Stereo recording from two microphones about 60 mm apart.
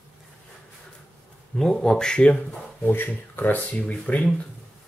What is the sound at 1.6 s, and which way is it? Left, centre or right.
Speech, centre.